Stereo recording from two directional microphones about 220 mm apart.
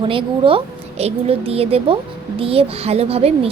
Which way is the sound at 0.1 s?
25° right (ahead or behind).